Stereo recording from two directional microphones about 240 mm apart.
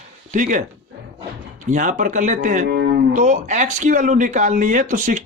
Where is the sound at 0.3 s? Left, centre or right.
Right.